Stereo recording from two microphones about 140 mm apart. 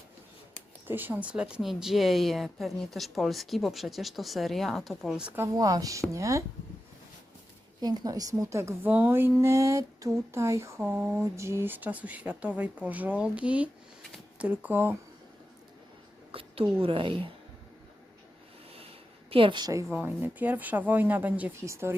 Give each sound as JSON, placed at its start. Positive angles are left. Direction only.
{"t": 0.9, "sound": "speech", "side_deg": -15}
{"t": 5.4, "sound": "a woman's voice", "side_deg": -25}
{"t": 7.8, "sound": "a woman's voice", "side_deg": -30}
{"t": 10.8, "sound": "speech", "side_deg": -10}
{"t": 11.2, "sound": "speech", "side_deg": -20}
{"t": 16.3, "sound": "a sound", "side_deg": -40}
{"t": 16.8, "sound": "a woman's voice", "side_deg": -40}
{"t": 19.3, "sound": "a woman's voice", "side_deg": -40}
{"t": 19.9, "sound": "speech", "side_deg": -15}